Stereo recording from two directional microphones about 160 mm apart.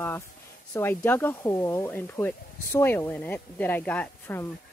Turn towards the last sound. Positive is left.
turn(degrees=10)  # may be behind; listen again after turning